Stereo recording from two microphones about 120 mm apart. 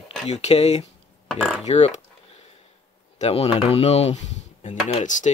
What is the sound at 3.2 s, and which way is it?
Speech, 55° left (ahead or behind).